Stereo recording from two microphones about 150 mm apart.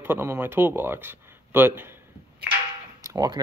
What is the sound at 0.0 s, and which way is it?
Speech, 15° right (ahead or behind).